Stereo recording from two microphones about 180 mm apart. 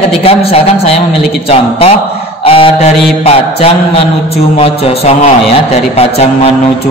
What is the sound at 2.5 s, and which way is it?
A man's voice, 35° left (ahead or behind).